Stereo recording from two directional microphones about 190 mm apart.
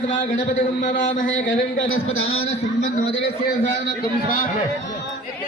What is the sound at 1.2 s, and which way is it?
A man's voice, 90° left.